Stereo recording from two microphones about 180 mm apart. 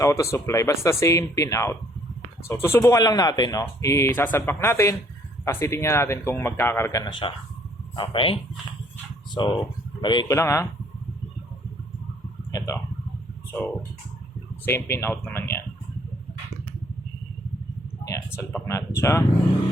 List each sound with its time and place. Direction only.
0.0 s speech: 15° left (ahead or behind)
7.0 s speech: 25° left (ahead or behind)
12.5 s a sound: 15° left (ahead or behind)
14.6 s speech: 15° left (ahead or behind)
18.1 s speech: 15° left (ahead or behind)